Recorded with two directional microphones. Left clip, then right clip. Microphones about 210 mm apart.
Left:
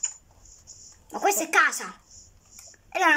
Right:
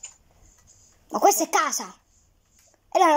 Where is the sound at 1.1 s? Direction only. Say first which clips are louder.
Right 2 dB; 25° right (ahead or behind).